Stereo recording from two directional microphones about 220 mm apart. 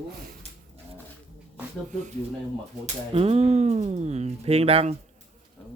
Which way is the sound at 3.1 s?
25° right (ahead or behind).